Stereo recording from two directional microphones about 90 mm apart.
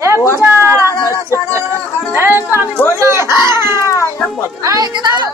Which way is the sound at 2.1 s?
25° right (ahead or behind).